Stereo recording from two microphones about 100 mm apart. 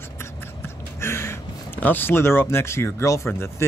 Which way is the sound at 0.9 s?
25° left (ahead or behind).